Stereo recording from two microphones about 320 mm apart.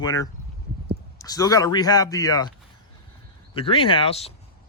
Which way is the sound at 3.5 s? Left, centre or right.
Centre.